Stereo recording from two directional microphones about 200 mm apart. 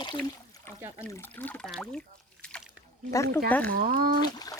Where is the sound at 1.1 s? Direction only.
10° left (ahead or behind).